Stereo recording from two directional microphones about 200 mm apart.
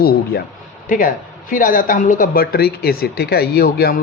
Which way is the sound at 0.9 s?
40° left (ahead or behind).